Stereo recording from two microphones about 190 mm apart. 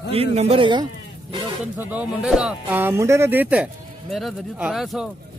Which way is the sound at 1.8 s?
5° right (ahead or behind).